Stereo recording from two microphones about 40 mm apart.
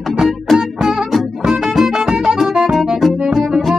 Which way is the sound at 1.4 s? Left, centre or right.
Centre.